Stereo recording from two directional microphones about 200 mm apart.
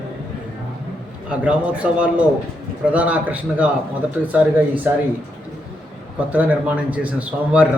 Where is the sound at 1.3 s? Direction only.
5° right (ahead or behind).